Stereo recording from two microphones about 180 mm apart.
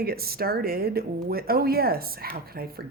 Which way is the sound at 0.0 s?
60° right (ahead or behind).